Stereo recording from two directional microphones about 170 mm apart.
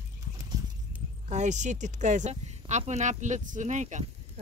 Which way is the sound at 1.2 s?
45° right (ahead or behind).